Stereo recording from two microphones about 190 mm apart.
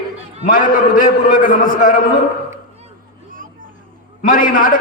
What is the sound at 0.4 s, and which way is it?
A man's voice, 45° left (ahead or behind).